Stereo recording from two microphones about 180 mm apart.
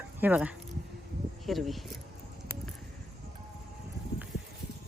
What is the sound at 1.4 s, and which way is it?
Speech, centre (ahead or behind).